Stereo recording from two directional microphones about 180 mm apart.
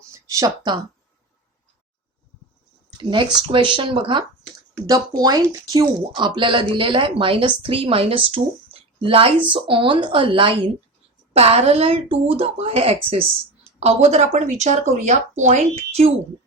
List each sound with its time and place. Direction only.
0.1 s a sound: 20° right (ahead or behind)
3.0 s speech: 25° right (ahead or behind)
5.2 s speech: 20° right (ahead or behind); by 16.0 s 40° right (ahead or behind)